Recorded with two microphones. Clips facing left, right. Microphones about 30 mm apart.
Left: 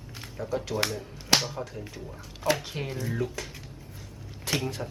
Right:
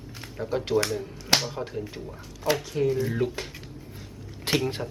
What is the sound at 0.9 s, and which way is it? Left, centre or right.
Music, centre.